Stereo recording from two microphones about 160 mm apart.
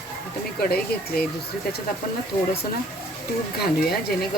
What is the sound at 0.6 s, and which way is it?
Speech, 70° left (ahead or behind).